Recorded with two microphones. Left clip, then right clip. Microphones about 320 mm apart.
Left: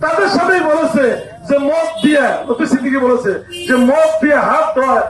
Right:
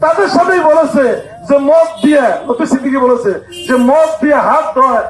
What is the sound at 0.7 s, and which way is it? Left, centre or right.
Speech, right.